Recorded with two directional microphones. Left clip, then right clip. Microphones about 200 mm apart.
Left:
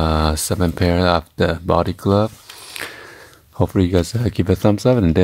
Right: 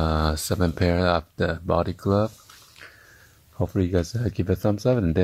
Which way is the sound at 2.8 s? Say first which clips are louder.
Left 15 dB; 20° left (ahead or behind).